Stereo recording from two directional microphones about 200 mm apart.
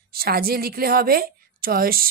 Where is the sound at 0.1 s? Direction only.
50° right (ahead or behind).